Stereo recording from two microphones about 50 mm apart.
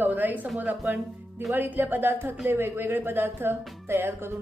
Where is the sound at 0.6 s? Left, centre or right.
Right.